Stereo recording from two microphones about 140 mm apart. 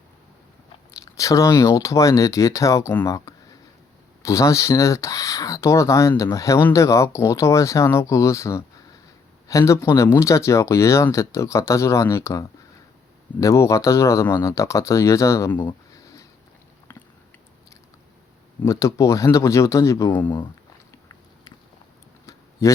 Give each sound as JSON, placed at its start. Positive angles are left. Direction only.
{"t": 0.9, "sound": "speech", "side_deg": 25}
{"t": 15.9, "sound": "a sound", "side_deg": 25}
{"t": 16.9, "sound": "biting", "side_deg": 15}
{"t": 18.6, "sound": "speech", "side_deg": 20}
{"t": 22.6, "sound": "speech", "side_deg": 20}